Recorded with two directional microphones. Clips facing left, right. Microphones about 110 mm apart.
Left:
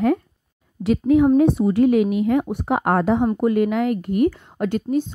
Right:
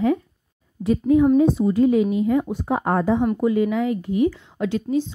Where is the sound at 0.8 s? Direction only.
80° left.